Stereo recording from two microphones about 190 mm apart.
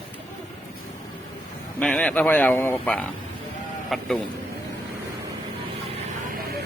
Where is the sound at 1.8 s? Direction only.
5° left (ahead or behind).